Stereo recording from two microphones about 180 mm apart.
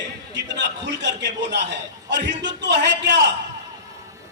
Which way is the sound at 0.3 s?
80° right.